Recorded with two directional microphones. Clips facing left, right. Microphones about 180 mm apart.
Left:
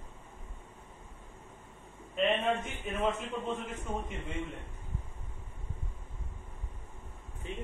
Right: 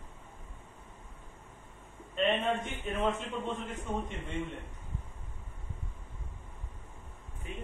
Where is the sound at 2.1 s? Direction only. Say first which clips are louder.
Even; 5° left (ahead or behind).